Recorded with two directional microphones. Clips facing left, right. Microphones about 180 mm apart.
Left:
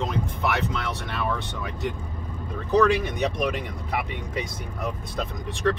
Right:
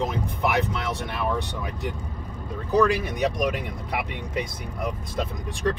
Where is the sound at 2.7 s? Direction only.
10° right (ahead or behind).